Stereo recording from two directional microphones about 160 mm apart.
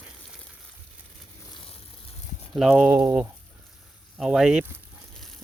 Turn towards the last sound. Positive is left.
turn(degrees=-5)  # may be behind; listen again after turning